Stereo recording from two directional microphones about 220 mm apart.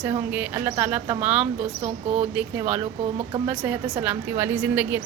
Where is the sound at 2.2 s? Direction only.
5° right (ahead or behind).